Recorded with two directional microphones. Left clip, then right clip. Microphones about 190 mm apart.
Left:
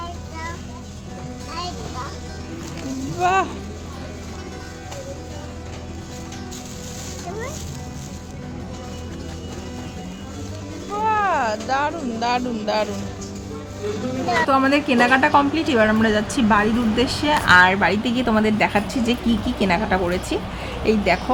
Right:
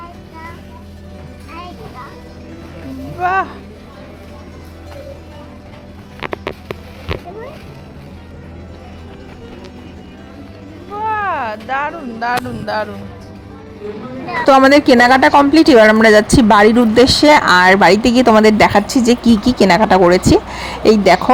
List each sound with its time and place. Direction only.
3.2 s speech: 10° left (ahead or behind)
10.9 s a sound: 5° left (ahead or behind)
14.4 s a woman's voice: 35° right (ahead or behind)